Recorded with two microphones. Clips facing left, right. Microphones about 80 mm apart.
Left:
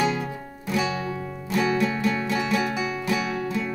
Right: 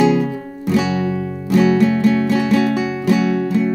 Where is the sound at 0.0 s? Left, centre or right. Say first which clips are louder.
Right 10 dB; right.